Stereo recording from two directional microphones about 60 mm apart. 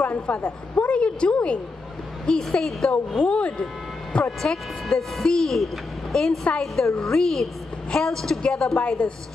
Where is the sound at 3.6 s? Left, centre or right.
Centre.